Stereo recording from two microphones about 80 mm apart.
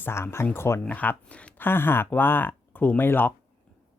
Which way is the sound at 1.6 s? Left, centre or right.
Left.